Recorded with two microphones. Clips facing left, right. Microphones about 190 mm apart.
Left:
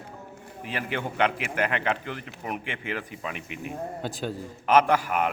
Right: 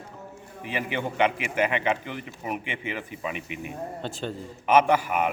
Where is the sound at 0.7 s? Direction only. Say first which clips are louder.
Right 2 dB; 10° right (ahead or behind).